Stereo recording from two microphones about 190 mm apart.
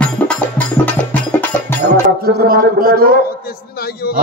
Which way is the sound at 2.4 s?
50° right (ahead or behind).